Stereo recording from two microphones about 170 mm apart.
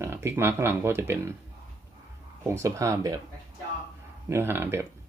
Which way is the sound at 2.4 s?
15° right (ahead or behind).